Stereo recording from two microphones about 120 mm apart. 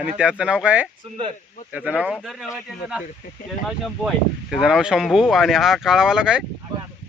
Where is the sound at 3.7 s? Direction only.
Centre (ahead or behind).